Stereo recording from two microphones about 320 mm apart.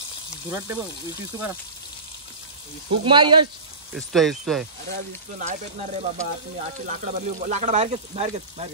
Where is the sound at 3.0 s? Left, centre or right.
Centre.